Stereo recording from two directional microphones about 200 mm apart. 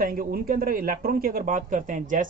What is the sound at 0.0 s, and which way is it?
Speech, 45° right (ahead or behind).